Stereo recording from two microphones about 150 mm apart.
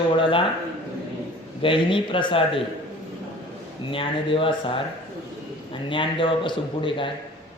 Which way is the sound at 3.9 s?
35° left (ahead or behind).